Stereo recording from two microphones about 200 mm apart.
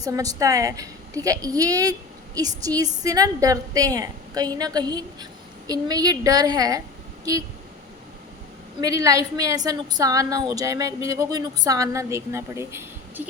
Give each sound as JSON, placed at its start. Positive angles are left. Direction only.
{"t": 0.0, "sound": "a woman's voice", "side_deg": -15}
{"t": 8.8, "sound": "a woman's voice", "side_deg": -15}